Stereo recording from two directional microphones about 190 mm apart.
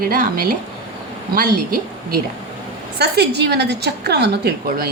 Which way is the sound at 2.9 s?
60° right (ahead or behind).